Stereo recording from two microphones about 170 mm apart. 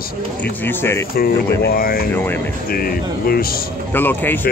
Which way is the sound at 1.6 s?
60° left (ahead or behind).